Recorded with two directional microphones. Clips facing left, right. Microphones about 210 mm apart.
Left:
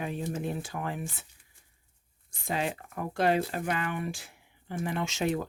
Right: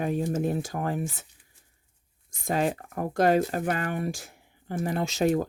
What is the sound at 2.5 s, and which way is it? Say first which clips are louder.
Speech: right 5 dB; 45° right (ahead or behind).